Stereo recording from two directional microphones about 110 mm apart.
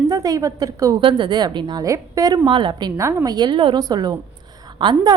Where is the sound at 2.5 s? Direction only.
45° right (ahead or behind).